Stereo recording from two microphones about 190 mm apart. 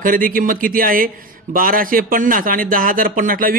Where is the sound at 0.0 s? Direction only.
45° right (ahead or behind).